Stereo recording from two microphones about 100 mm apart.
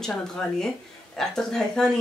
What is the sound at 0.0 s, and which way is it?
Speech, 5° left (ahead or behind).